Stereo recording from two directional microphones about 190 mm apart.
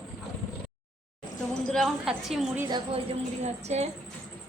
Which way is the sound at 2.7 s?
25° right (ahead or behind).